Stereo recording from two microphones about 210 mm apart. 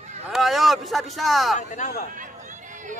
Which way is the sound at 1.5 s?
35° left (ahead or behind).